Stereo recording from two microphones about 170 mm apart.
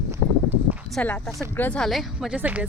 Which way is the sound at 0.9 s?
5° left (ahead or behind).